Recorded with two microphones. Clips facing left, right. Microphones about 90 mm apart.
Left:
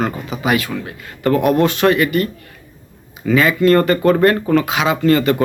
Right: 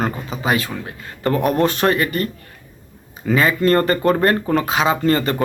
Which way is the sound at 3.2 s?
35° right (ahead or behind).